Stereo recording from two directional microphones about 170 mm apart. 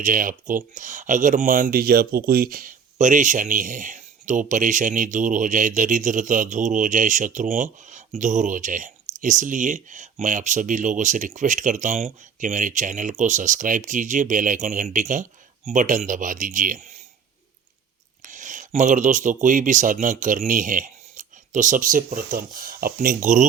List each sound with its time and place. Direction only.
0.0 s speech: 50° right (ahead or behind)
18.2 s speech: 50° right (ahead or behind)